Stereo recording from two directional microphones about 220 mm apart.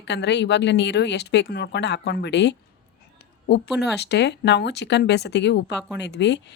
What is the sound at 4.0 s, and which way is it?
Speech, 50° left (ahead or behind).